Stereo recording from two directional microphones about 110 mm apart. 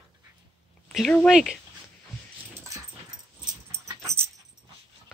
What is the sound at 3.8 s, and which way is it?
Dog, 25° right (ahead or behind).